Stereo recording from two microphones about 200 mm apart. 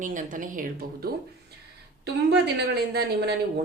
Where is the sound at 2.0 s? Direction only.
60° right (ahead or behind).